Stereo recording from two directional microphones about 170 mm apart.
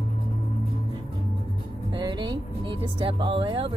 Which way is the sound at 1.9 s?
25° right (ahead or behind).